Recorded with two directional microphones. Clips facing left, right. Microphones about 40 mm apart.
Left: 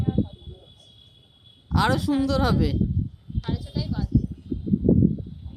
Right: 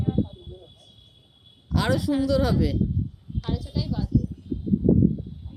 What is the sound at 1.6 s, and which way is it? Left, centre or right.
Speech, left.